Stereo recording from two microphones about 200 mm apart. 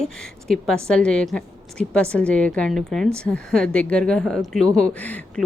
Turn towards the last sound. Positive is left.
turn(degrees=5)  # may be behind; listen again after turning